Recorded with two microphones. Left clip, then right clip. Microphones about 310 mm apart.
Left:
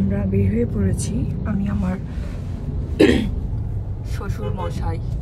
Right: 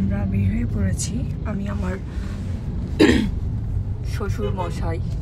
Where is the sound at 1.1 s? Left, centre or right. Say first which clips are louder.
Left 3 dB; centre.